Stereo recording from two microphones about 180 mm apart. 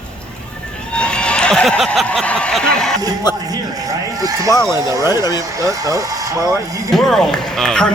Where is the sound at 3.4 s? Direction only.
20° right (ahead or behind).